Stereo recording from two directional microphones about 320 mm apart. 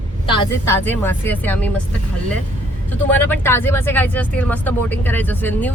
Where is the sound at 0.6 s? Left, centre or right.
Centre.